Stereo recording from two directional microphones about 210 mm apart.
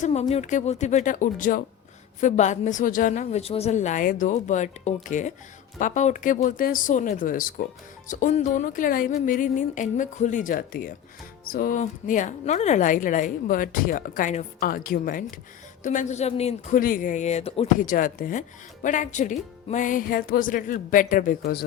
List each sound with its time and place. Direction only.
0.0 s speech: 30° left (ahead or behind)